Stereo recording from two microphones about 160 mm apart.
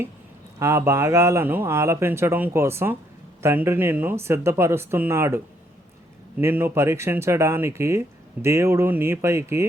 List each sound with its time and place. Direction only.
0.6 s speech: 15° right (ahead or behind)
6.4 s speech: 15° right (ahead or behind)